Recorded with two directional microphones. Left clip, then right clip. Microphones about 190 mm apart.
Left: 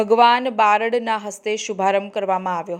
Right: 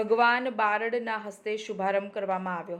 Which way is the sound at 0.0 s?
30° left (ahead or behind).